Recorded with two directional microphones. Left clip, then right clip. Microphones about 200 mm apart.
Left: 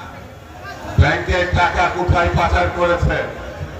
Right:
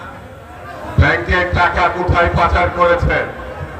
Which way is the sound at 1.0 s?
55° right (ahead or behind).